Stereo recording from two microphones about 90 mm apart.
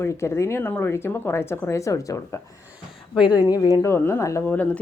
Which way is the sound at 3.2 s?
15° right (ahead or behind).